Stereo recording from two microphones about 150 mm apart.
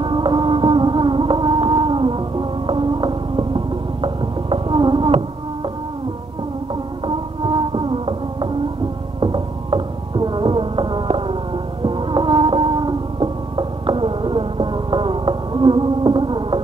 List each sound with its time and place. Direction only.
0.0 s music: 30° right (ahead or behind)
7.1 s music: 35° right (ahead or behind)